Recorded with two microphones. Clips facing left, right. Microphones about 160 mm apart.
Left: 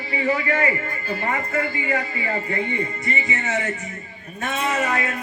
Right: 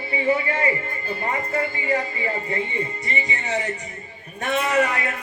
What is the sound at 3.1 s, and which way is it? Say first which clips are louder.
Music: left 1 dB; 35° right (ahead or behind).